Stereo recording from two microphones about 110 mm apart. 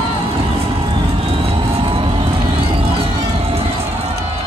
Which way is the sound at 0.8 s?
55° right (ahead or behind).